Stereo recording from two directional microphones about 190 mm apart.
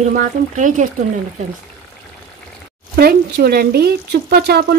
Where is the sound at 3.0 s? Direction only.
55° right (ahead or behind).